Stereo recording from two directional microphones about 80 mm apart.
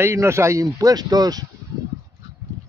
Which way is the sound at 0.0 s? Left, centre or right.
Right.